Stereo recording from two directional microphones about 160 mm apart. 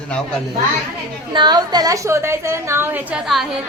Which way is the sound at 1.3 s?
25° right (ahead or behind).